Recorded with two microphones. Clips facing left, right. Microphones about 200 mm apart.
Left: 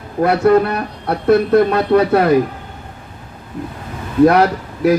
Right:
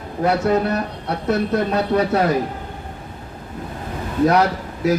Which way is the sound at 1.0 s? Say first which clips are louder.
Left 10 dB; 60° left (ahead or behind).